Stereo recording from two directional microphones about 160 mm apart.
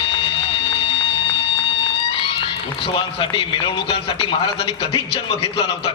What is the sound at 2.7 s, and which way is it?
A man's voice, 35° left (ahead or behind).